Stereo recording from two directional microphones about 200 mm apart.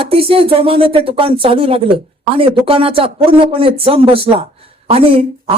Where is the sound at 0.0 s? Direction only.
30° right (ahead or behind).